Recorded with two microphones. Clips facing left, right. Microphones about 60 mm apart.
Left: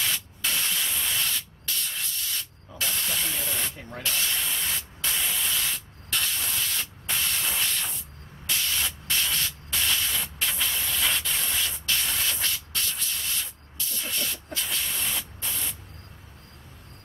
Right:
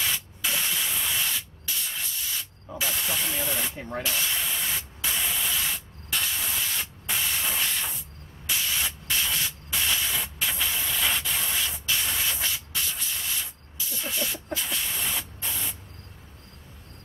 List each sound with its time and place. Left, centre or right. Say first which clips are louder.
0.0 s spray: even; centre
2.8 s speech: right 1 dB; centre
3.7 s spray: right 6 dB; right
4.0 s spray: left 1 dB; centre